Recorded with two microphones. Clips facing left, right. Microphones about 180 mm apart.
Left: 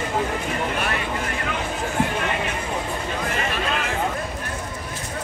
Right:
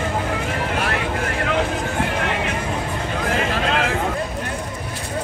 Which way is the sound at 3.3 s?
90° right.